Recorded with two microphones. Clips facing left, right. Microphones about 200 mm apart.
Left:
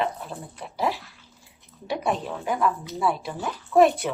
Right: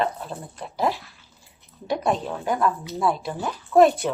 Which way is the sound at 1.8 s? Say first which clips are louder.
Right 3 dB; 5° left (ahead or behind).